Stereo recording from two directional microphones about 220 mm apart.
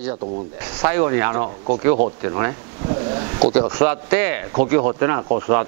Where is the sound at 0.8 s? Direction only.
20° right (ahead or behind).